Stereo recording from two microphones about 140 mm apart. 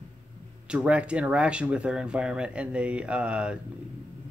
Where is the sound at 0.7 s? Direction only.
10° right (ahead or behind).